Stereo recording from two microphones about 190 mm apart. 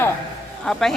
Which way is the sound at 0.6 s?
Centre (ahead or behind).